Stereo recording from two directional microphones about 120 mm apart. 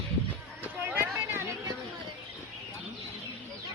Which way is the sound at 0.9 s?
15° right (ahead or behind).